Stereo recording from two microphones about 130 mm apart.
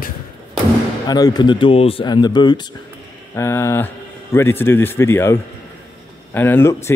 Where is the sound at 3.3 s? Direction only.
20° left (ahead or behind).